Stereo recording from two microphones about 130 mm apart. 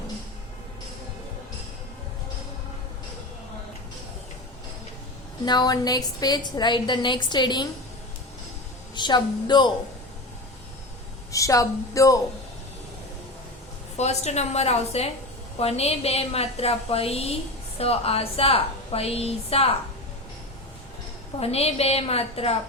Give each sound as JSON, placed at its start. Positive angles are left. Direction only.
{"t": 5.5, "sound": "a woman's voice", "side_deg": 30}
{"t": 9.0, "sound": "a woman's voice", "side_deg": 35}
{"t": 11.3, "sound": "a woman's voice", "side_deg": 25}
{"t": 13.9, "sound": "a woman's voice", "side_deg": 60}
{"t": 21.3, "sound": "a woman's voice", "side_deg": 50}